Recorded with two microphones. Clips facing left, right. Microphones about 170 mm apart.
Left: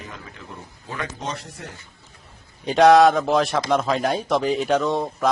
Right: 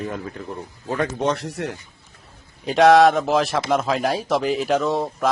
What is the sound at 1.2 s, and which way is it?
Speech, 75° right (ahead or behind).